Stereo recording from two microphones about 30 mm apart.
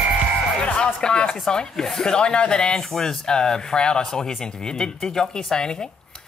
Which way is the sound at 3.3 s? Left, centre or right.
Left.